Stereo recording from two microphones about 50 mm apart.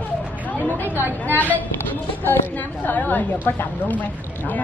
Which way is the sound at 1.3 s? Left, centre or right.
Left.